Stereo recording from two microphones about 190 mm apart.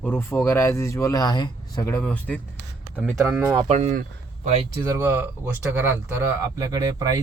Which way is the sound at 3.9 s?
50° right (ahead or behind).